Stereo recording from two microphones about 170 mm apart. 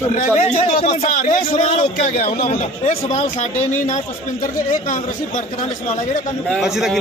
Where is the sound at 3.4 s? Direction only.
45° left (ahead or behind).